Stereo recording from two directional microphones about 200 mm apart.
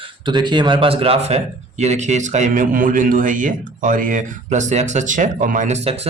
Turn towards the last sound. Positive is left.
turn(degrees=-30)  # may be behind; listen again after turning